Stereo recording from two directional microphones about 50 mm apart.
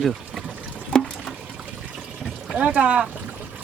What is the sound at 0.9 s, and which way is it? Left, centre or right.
Water, centre.